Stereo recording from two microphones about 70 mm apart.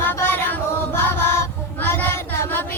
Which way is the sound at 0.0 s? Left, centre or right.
Left.